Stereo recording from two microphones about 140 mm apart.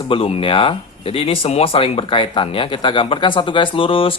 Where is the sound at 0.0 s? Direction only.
40° left (ahead or behind).